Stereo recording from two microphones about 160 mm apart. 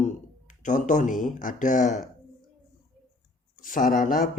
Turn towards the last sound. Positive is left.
turn(degrees=55)  # may be behind; listen again after turning